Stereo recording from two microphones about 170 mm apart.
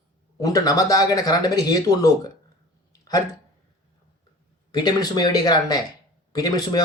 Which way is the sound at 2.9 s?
20° left (ahead or behind).